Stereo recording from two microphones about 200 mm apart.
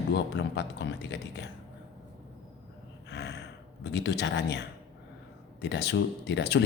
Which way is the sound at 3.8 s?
60° left (ahead or behind).